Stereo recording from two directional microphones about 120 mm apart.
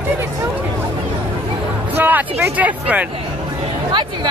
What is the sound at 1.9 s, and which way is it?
Speech, 15° right (ahead or behind).